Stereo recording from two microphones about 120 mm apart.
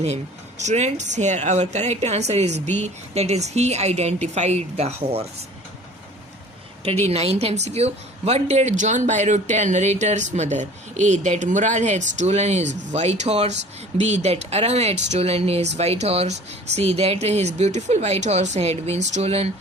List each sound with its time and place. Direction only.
0.6 s a woman's voice: 75° right (ahead or behind)
7.1 s a woman's voice: 60° right (ahead or behind)